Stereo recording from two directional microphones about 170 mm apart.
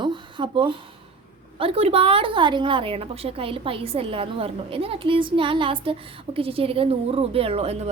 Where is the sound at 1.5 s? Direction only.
35° right (ahead or behind).